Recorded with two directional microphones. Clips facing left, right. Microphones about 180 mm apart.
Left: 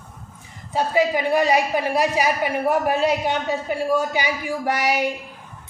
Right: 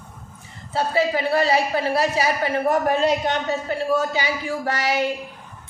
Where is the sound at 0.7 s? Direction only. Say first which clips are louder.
Left 1 dB; 15° left (ahead or behind).